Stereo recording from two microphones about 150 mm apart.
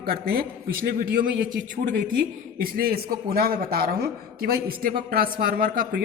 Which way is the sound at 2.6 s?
85° right.